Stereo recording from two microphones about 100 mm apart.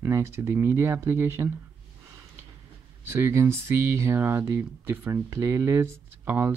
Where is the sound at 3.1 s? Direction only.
25° right (ahead or behind).